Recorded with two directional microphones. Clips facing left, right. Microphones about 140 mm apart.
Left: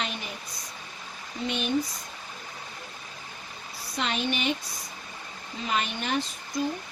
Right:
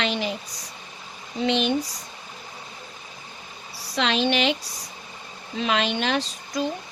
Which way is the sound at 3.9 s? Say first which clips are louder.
Right 7 dB; 90° right.